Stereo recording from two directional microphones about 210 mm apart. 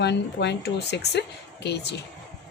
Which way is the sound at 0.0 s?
55° left (ahead or behind).